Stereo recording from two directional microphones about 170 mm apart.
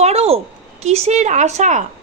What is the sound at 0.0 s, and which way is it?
A woman's voice, 40° right (ahead or behind).